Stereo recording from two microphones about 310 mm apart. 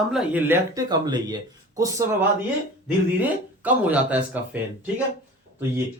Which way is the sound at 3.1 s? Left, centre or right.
Centre.